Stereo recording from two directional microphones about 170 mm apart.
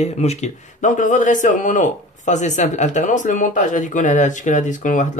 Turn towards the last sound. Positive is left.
turn(degrees=50)  # may be behind; listen again after turning